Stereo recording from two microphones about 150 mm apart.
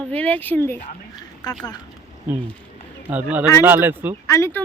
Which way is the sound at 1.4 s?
30° left (ahead or behind).